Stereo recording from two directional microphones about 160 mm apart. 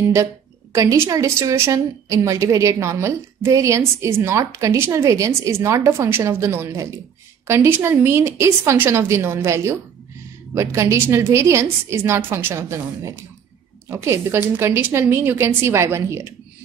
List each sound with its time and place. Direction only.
0.7 s a woman's voice: 20° right (ahead or behind)